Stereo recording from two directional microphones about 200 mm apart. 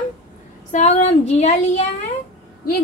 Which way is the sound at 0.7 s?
35° left (ahead or behind).